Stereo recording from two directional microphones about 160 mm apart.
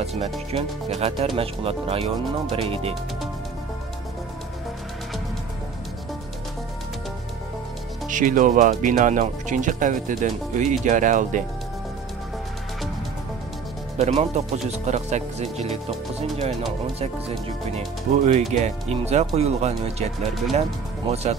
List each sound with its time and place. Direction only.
0.0 s speech: 40° right (ahead or behind)
8.1 s speech: 55° right (ahead or behind)
13.9 s speech: 45° right (ahead or behind)
17.7 s speech: 45° right (ahead or behind)
21.1 s speech: 40° right (ahead or behind)